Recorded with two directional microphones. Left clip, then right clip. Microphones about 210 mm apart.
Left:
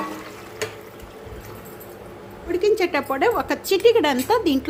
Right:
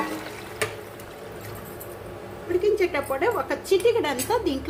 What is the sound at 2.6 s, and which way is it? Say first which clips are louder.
A woman's voice: left 4 dB; 45° left (ahead or behind).